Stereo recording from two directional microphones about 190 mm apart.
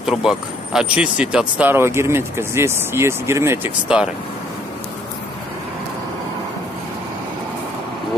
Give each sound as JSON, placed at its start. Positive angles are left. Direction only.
{"t": 0.0, "sound": "speech", "side_deg": 0}